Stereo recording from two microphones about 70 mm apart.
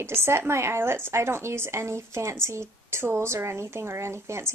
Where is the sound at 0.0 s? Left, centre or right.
Right.